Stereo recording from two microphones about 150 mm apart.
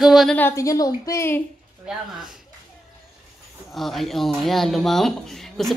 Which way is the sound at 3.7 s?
Centre (ahead or behind).